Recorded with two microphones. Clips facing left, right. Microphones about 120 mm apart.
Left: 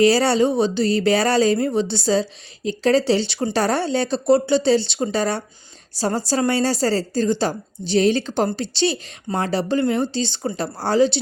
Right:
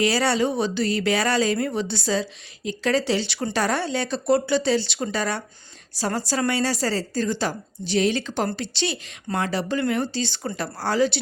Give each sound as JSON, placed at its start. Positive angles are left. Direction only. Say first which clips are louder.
{"t": 0.0, "sound": "a woman's voice", "louder": "left 5 dB", "side_deg": 30}